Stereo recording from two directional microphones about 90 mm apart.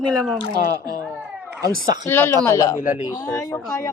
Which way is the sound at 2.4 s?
35° left (ahead or behind).